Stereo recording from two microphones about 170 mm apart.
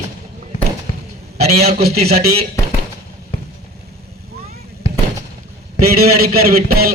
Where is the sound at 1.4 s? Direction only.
40° right (ahead or behind).